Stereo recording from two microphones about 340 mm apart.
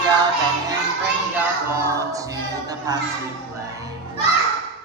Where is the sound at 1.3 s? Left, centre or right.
Centre.